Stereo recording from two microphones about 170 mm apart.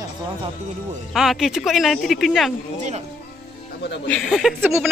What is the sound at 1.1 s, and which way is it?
Speech, centre (ahead or behind).